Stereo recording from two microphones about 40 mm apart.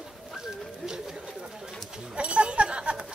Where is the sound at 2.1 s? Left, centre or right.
Right.